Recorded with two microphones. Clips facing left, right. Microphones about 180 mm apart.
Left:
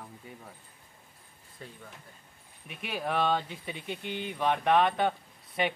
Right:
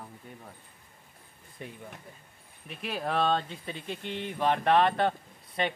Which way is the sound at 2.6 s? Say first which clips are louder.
Right 1 dB; centre (ahead or behind).